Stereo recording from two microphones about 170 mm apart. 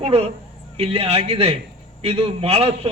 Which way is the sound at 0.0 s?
35° right (ahead or behind).